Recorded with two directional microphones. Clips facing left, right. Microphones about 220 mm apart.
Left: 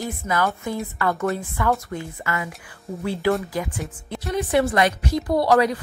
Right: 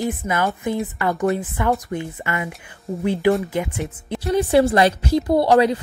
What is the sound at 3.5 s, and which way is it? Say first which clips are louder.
A woman's voice: right 3 dB; 25° right (ahead or behind).